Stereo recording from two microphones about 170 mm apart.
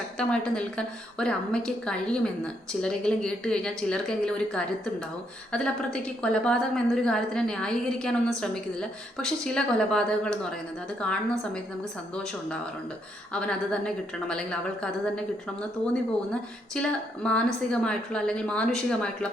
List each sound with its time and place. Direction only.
0.2 s a woman's voice: 5° left (ahead or behind)
5.5 s a woman's voice: 5° left (ahead or behind)
16.7 s a woman's voice: 5° left (ahead or behind)